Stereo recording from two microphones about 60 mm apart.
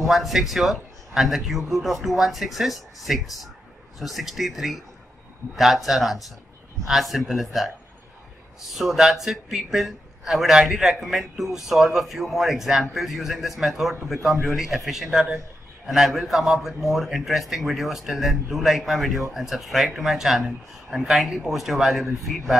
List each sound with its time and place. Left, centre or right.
0.0 s a man's voice: centre
8.7 s a man's voice: centre